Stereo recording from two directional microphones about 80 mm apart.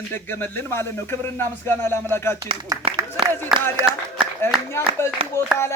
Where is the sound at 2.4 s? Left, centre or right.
Right.